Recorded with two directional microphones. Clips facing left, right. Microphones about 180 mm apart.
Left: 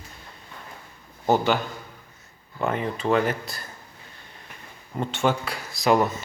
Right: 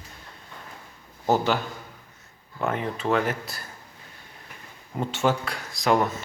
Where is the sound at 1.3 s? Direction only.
Centre (ahead or behind).